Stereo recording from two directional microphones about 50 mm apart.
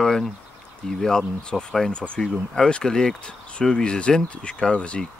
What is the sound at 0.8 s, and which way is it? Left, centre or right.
Speech, centre.